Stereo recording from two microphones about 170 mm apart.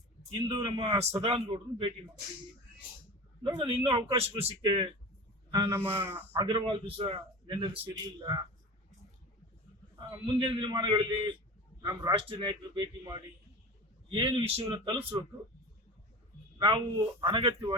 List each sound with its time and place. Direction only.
0.3 s a man's voice: 25° right (ahead or behind)
0.9 s a man's voice: 40° right (ahead or behind)
3.4 s a man's voice: 30° right (ahead or behind)
4.6 s a man's voice: 25° right (ahead or behind)
5.7 s speech: 10° right (ahead or behind)
6.4 s a man's voice: 30° right (ahead or behind)
10.1 s a man's voice: 30° right (ahead or behind)
12.1 s a man's voice: 30° right (ahead or behind)
16.6 s a man's voice: 25° right (ahead or behind)